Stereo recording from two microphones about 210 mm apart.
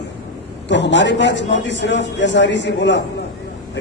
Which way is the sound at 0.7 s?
55° left (ahead or behind).